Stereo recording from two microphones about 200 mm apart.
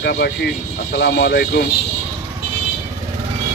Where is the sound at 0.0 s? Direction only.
55° left (ahead or behind).